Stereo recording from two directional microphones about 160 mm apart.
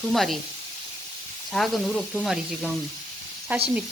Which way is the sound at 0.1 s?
Centre (ahead or behind).